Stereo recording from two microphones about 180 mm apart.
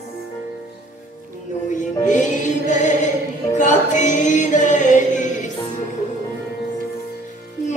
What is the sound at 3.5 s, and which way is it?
Music, 45° left (ahead or behind).